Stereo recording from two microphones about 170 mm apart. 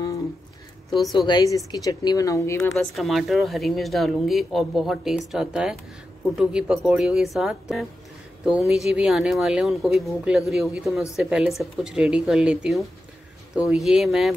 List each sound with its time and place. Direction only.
1.1 s speech: 25° left (ahead or behind)
3.0 s speech: centre (ahead or behind)